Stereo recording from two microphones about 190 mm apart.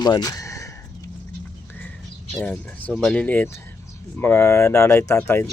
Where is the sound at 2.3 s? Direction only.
5° left (ahead or behind).